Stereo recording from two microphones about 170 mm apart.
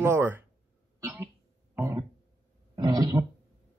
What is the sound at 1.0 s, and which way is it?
Music, 15° right (ahead or behind).